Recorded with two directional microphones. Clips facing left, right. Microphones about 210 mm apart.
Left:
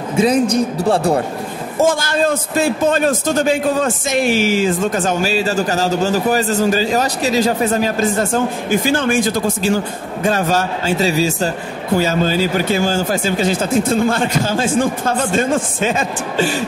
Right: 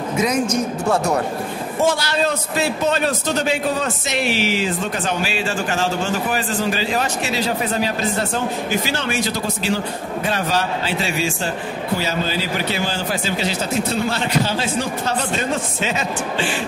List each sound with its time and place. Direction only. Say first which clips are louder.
0.1 s a man's voice: left 6 dB; 30° left (ahead or behind)
1.9 s a man's voice: left 3 dB; 50° left (ahead or behind)